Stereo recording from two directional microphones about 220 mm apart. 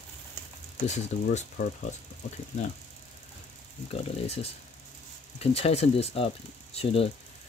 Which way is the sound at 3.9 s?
30° left (ahead or behind).